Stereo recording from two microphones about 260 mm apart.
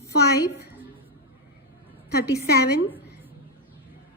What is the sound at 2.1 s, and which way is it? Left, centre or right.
Speech, left.